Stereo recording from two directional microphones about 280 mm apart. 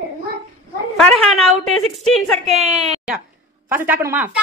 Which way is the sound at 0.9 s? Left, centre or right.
Centre.